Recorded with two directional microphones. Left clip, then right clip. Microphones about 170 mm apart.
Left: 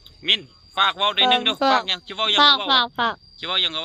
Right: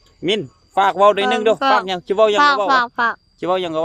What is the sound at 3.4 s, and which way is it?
Speech, 45° right (ahead or behind).